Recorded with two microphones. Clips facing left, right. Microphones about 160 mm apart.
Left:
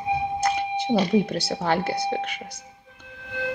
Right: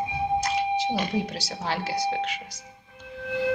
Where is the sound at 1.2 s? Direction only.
55° left (ahead or behind).